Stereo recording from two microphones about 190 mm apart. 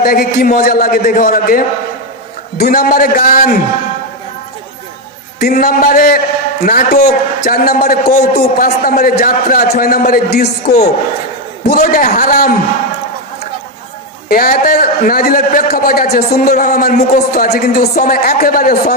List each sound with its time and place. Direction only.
0.0 s a man's voice: 50° left (ahead or behind)
5.4 s a man's voice: 50° left (ahead or behind)
11.6 s a man's voice: 50° left (ahead or behind)
14.3 s a man's voice: 50° left (ahead or behind)